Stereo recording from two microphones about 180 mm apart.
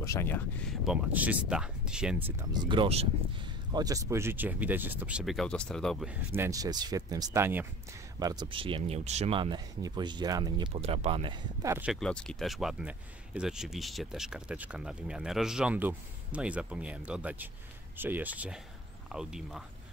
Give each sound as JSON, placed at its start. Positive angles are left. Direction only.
{"t": 0.0, "sound": "speech", "side_deg": 15}
{"t": 0.8, "sound": "speech", "side_deg": -10}
{"t": 2.7, "sound": "speech", "side_deg": -30}
{"t": 3.7, "sound": "speech", "side_deg": -20}
{"t": 6.3, "sound": "speech", "side_deg": -15}
{"t": 11.6, "sound": "speech", "side_deg": -15}
{"t": 11.9, "sound": "speech", "side_deg": 5}